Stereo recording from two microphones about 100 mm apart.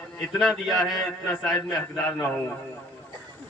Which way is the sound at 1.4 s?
10° left (ahead or behind).